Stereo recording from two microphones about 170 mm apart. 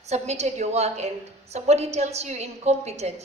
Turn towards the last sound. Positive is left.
turn(degrees=-40)  # may be behind; listen again after turning